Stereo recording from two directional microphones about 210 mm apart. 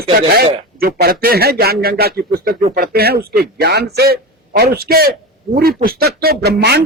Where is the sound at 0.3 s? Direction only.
45° right (ahead or behind).